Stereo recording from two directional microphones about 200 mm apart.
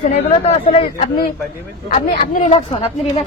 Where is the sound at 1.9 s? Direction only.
40° left (ahead or behind).